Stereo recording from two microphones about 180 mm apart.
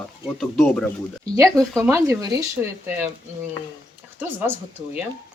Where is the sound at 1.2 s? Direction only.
20° right (ahead or behind).